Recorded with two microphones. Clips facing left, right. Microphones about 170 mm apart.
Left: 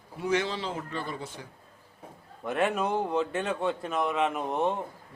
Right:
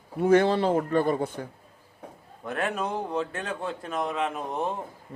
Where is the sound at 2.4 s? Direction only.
25° left (ahead or behind).